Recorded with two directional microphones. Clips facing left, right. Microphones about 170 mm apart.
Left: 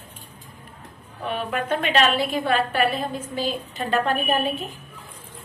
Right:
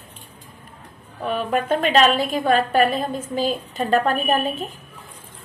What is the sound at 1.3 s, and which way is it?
A woman's voice, 40° right (ahead or behind).